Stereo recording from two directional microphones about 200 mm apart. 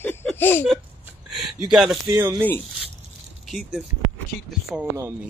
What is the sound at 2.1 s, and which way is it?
Speech, 20° right (ahead or behind).